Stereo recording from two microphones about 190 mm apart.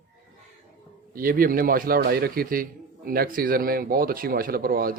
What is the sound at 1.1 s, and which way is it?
A man's voice, 50° right (ahead or behind).